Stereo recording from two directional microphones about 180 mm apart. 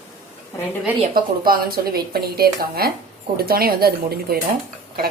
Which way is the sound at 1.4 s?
55° right (ahead or behind).